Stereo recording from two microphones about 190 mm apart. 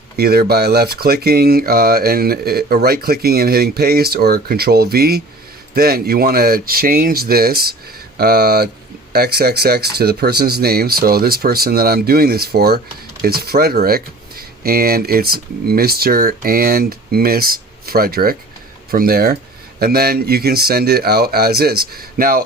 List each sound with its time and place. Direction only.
0.2 s speech: 55° right (ahead or behind)